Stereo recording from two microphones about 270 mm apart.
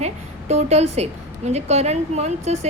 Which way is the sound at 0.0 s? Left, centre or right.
Right.